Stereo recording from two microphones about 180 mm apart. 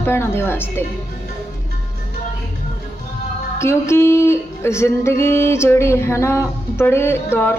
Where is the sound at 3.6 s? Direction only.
15° left (ahead or behind).